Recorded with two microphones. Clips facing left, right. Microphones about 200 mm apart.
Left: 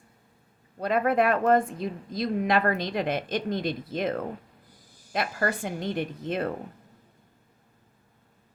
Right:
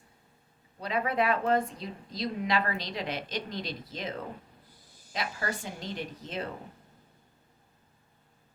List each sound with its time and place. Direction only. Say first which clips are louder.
0.8 s a woman's voice: left 6 dB; 50° left (ahead or behind)